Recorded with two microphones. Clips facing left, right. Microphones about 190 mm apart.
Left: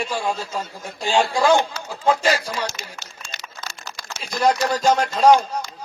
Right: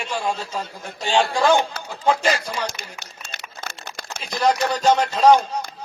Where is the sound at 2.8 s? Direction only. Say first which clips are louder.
Even; 55° right (ahead or behind).